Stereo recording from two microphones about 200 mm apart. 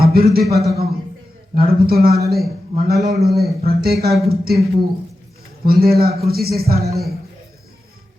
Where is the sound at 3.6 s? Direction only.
50° right (ahead or behind).